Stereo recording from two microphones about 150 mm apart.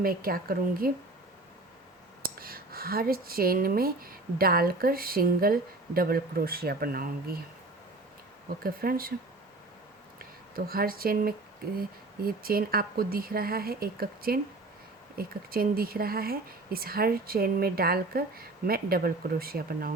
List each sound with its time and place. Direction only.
0.0 s speech: 80° right
2.2 s speech: 80° right
8.6 s speech: 80° right
10.5 s speech: 80° right